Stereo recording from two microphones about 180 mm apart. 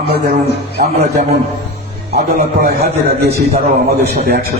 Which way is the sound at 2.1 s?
60° right (ahead or behind).